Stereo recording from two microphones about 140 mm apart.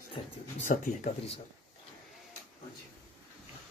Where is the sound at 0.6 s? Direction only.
70° left (ahead or behind).